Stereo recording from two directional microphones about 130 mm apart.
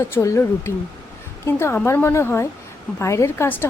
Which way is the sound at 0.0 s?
20° left (ahead or behind).